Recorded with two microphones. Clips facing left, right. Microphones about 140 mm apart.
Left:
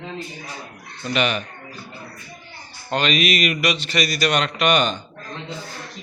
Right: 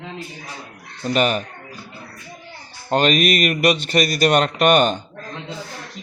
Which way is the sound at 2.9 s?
50° right (ahead or behind).